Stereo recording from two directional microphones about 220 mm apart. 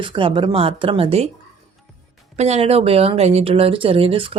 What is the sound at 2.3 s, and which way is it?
Speech, 30° right (ahead or behind).